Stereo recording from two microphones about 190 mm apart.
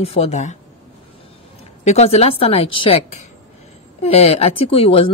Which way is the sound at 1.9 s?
35° left (ahead or behind).